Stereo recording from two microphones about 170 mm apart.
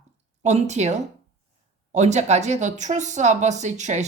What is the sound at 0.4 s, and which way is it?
Speech, 40° right (ahead or behind).